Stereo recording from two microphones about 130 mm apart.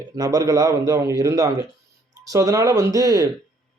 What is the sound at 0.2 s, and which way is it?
Speech, 25° right (ahead or behind).